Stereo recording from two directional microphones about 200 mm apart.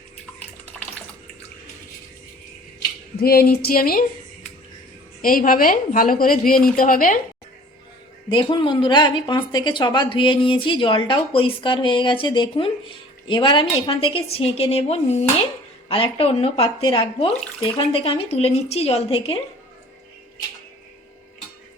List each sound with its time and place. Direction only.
3.2 s a woman's voice: 50° left (ahead or behind)
5.2 s a woman's voice: 45° left (ahead or behind)
8.3 s speech: 25° left (ahead or behind)